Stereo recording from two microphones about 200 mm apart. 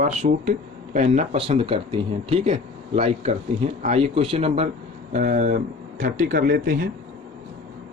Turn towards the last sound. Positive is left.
turn(degrees=-45)  # may be behind; listen again after turning